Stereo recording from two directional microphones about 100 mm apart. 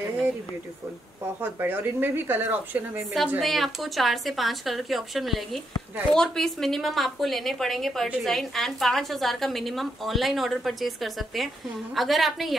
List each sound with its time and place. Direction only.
1.4 s speech: 20° right (ahead or behind)
3.3 s a woman's voice: centre (ahead or behind)